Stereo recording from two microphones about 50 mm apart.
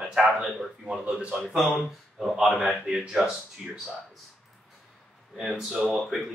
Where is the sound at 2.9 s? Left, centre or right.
Centre.